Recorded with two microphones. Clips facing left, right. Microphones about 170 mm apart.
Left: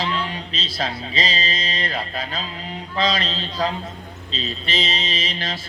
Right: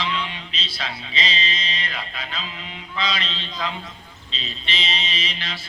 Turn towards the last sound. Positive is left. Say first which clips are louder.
# left 4 dB
turn(degrees=45)  # may be behind; listen again after turning